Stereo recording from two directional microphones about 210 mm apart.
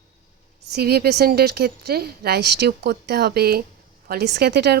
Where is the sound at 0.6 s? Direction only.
50° right (ahead or behind).